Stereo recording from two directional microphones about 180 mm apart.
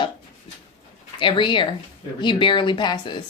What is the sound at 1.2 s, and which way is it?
Speech, 25° left (ahead or behind).